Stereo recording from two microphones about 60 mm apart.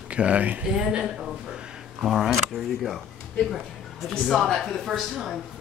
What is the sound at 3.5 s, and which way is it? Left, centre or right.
A woman's voice, centre.